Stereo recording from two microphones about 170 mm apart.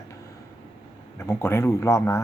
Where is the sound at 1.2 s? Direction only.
15° left (ahead or behind).